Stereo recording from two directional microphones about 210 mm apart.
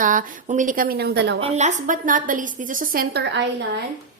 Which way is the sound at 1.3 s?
30° right (ahead or behind).